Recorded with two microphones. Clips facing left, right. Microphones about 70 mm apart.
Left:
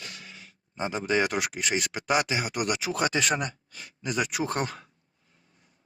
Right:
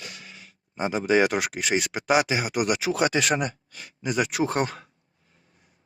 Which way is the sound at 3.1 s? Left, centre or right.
Right.